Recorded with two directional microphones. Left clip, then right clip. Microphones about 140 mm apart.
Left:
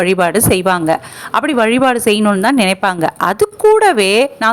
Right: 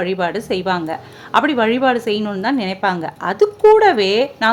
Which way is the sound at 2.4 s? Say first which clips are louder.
Left 6 dB; 50° left (ahead or behind).